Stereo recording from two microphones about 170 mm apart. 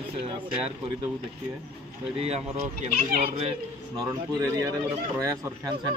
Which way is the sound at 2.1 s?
40° right (ahead or behind).